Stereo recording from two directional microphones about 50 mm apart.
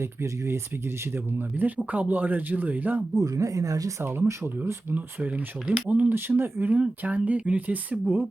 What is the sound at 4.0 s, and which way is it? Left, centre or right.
Speech, right.